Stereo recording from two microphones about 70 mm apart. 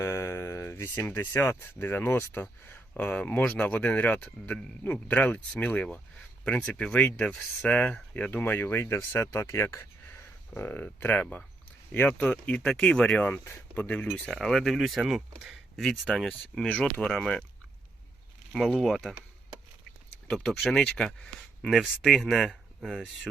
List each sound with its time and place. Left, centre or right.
0.0 s speech: left
3.0 s speech: left
10.5 s speech: left
14.4 s speech: centre
18.5 s speech: centre
20.3 s speech: centre
20.8 s speech: centre